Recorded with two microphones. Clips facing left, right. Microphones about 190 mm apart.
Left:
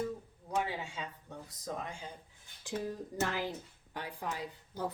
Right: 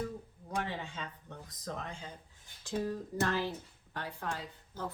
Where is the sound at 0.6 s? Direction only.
10° left (ahead or behind).